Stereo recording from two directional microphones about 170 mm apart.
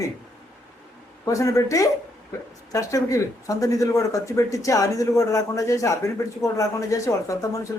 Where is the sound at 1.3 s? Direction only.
20° left (ahead or behind).